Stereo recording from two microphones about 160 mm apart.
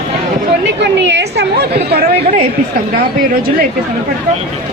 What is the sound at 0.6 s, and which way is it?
Chatter, 90° right.